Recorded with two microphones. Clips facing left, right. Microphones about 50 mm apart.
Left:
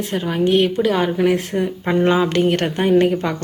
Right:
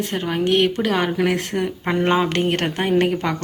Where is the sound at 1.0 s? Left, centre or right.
Right.